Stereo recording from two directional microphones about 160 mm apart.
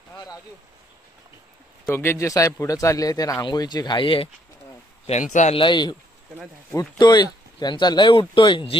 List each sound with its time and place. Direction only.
0.1 s a sound: 25° left (ahead or behind)
1.9 s speech: 15° left (ahead or behind); by 4.3 s 35° left (ahead or behind)
5.3 s a man's voice: 50° left (ahead or behind)
5.6 s speech: 30° left (ahead or behind)